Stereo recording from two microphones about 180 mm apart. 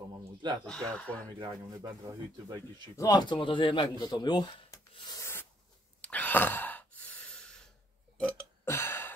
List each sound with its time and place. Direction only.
0.7 s speech: 5° left (ahead or behind)
1.2 s speech: 20° right (ahead or behind)
3.0 s a man's voice: 25° left (ahead or behind)
5.9 s sigh: 10° left (ahead or behind)
8.2 s burping: 10° left (ahead or behind)